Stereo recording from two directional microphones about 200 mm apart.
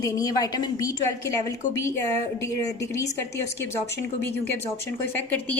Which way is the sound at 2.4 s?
15° left (ahead or behind).